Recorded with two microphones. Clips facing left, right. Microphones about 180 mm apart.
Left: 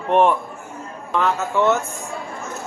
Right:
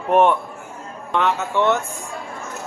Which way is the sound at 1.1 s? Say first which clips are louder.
Even; centre (ahead or behind).